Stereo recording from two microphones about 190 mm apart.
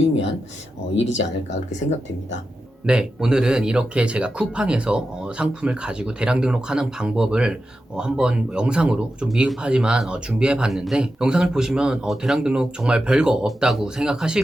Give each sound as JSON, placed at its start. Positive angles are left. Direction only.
{"t": 0.9, "sound": "speech", "side_deg": 75}
{"t": 2.8, "sound": "speech", "side_deg": -5}